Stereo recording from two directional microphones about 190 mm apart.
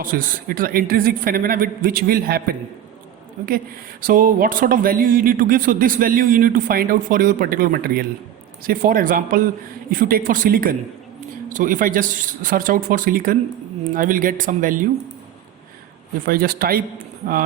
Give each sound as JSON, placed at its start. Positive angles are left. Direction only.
{"t": 0.0, "sound": "speech", "side_deg": -45}
{"t": 4.0, "sound": "speech", "side_deg": -45}
{"t": 16.2, "sound": "speech", "side_deg": -50}